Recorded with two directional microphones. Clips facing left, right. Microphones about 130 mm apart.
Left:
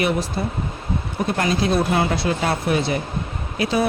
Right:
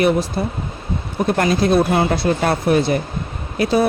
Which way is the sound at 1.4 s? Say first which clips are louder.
Right 5 dB; 45° right (ahead or behind).